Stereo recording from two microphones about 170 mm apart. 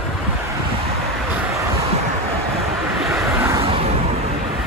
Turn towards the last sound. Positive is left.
turn(degrees=-15)  # may be behind; listen again after turning